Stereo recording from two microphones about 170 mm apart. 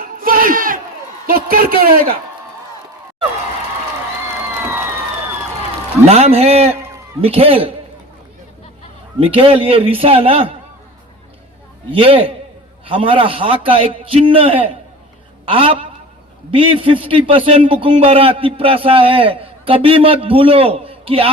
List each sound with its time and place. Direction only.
0.0 s crowd: 60° right (ahead or behind)
1.3 s a woman's voice: 60° right (ahead or behind)
6.1 s a man's voice: 40° right (ahead or behind)
9.1 s a man's voice: 35° right (ahead or behind)
11.9 s a man's voice: 30° right (ahead or behind)